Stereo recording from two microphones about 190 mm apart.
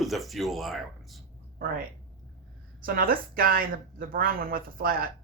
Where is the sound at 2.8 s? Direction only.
50° right (ahead or behind).